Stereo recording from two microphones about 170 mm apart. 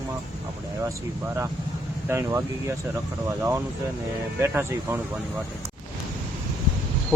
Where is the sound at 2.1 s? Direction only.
15° right (ahead or behind).